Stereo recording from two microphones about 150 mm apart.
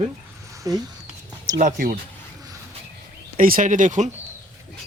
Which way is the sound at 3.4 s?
65° right (ahead or behind).